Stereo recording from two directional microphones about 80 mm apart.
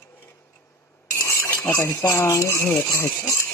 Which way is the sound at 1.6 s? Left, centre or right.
Left.